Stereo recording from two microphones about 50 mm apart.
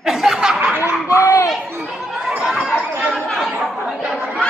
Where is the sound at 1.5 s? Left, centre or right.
Centre.